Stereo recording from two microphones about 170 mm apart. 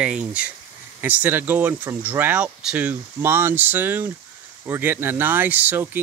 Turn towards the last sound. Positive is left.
turn(degrees=-10)  # may be behind; listen again after turning